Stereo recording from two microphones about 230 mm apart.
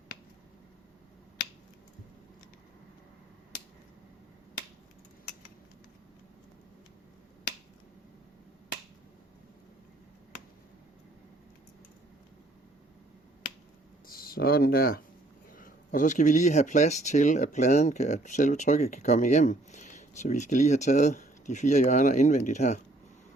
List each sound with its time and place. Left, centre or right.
14.1 s speech: left